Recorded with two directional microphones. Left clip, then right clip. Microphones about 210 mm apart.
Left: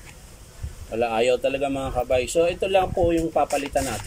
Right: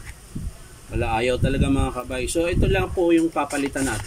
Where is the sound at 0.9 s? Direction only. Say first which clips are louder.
Left 2 dB; 10° left (ahead or behind).